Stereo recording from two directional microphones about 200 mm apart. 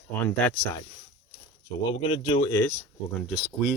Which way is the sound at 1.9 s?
30° left (ahead or behind).